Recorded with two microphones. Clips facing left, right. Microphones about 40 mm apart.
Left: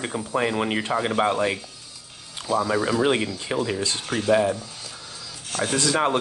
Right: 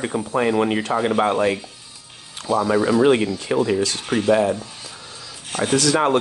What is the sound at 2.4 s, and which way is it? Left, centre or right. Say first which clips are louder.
Speech: right 3 dB; right.